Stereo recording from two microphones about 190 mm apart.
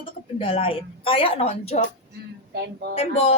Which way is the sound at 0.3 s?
30° left (ahead or behind).